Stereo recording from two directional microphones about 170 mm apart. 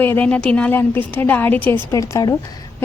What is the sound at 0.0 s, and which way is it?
A woman's voice, 10° left (ahead or behind).